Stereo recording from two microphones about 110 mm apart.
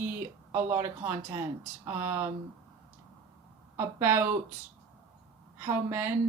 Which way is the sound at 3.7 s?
20° right (ahead or behind).